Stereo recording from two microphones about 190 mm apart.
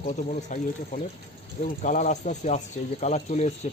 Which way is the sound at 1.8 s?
40° left (ahead or behind).